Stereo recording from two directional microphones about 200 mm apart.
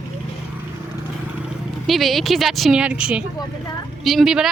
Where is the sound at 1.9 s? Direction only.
Centre (ahead or behind).